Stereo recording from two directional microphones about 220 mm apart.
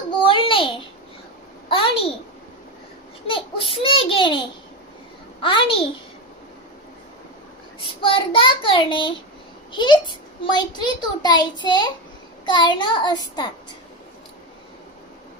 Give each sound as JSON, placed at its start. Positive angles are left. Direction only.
{"t": 0.2, "sound": "babbling", "side_deg": 25}
{"t": 1.7, "sound": "a child's voice", "side_deg": 25}
{"t": 3.3, "sound": "a child's voice", "side_deg": 25}
{"t": 8.0, "sound": "a child's voice", "side_deg": 25}